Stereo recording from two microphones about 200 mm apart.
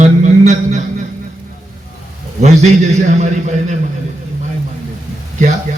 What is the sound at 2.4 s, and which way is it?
A man's voice, 35° right (ahead or behind).